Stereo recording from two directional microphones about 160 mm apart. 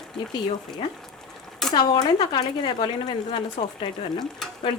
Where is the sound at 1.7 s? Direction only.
25° left (ahead or behind).